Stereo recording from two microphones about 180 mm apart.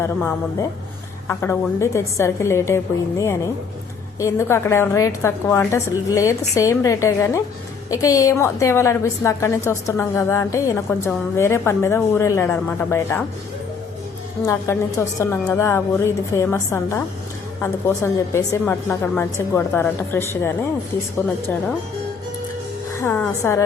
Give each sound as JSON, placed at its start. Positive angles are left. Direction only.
{"t": 0.0, "sound": "a woman's voice", "side_deg": 10}
{"t": 14.4, "sound": "a woman's voice", "side_deg": 15}
{"t": 23.0, "sound": "a woman's voice", "side_deg": 10}